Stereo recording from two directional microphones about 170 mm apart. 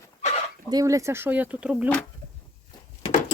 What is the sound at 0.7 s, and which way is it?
Speech, 20° right (ahead or behind).